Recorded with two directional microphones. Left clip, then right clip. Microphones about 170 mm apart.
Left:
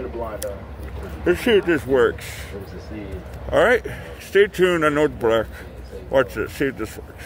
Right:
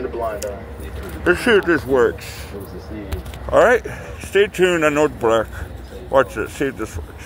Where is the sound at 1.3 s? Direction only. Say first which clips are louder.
Right 3 dB; 15° left (ahead or behind).